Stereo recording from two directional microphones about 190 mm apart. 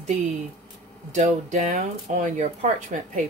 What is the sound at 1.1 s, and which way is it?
Speech, 40° right (ahead or behind).